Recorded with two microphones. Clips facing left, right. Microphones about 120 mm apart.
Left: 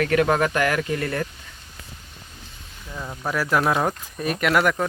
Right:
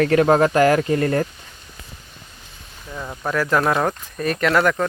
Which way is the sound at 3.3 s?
5° left (ahead or behind).